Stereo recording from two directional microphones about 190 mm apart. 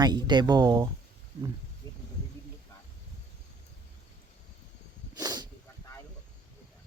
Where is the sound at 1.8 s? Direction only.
20° left (ahead or behind).